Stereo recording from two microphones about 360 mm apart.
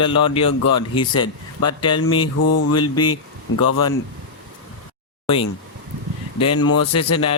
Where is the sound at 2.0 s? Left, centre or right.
Left.